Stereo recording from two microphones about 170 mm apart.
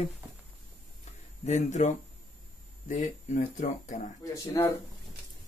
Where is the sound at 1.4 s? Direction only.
40° left (ahead or behind).